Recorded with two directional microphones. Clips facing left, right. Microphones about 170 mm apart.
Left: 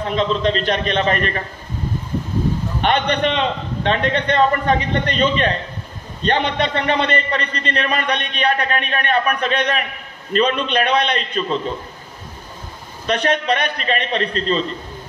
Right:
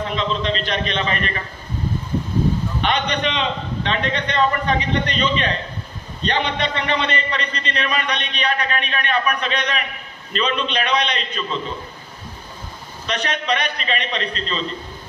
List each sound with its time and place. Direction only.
0.1 s a man's voice: 45° left (ahead or behind)
2.8 s a man's voice: 55° left (ahead or behind)
13.0 s a man's voice: 50° left (ahead or behind)